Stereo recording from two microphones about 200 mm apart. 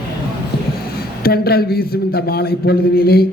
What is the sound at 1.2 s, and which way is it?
A man's voice, 50° left (ahead or behind).